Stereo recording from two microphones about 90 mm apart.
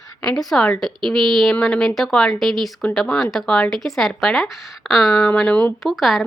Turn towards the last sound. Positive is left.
turn(degrees=0)  # may be behind; listen again after turning